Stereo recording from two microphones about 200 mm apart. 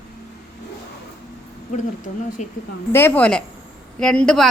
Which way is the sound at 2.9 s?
10° left (ahead or behind).